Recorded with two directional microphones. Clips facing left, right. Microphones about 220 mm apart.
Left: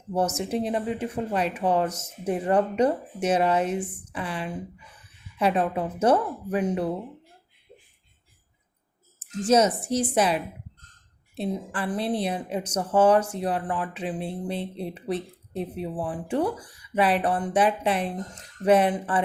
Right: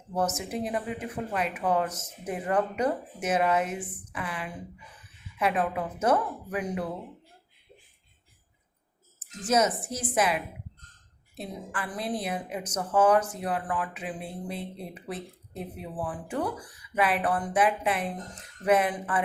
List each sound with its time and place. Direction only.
0.1 s a woman's voice: 30° left (ahead or behind)
9.4 s a woman's voice: 30° left (ahead or behind)